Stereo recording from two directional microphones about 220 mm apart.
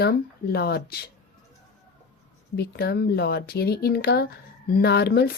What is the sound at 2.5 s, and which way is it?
A woman's voice, 45° left (ahead or behind).